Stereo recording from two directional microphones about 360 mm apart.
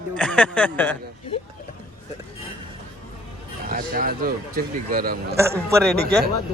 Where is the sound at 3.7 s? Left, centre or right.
Right.